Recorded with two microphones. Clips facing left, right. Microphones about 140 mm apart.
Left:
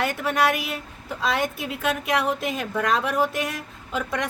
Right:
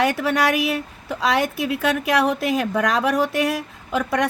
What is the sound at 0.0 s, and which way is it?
A woman's voice, 90° right.